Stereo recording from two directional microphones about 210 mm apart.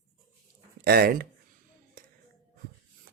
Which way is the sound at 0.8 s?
45° right (ahead or behind).